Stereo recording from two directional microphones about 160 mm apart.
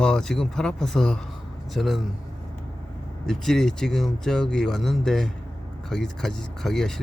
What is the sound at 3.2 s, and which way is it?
Speech, centre (ahead or behind).